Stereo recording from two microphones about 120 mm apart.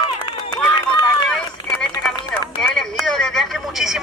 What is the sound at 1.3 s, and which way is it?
Run, 5° left (ahead or behind).